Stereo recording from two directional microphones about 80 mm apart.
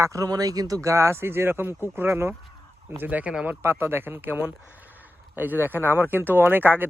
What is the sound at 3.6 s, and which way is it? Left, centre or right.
Speech, right.